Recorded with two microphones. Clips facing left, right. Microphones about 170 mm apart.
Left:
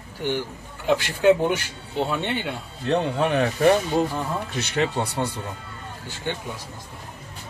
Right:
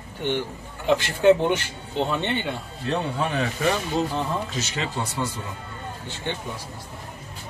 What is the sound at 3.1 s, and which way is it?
Speech, 65° left (ahead or behind).